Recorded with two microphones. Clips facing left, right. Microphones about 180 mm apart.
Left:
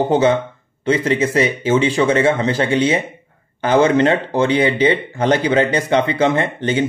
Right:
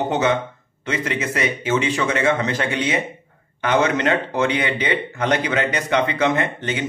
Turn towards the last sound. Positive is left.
turn(degrees=30)  # may be behind; listen again after turning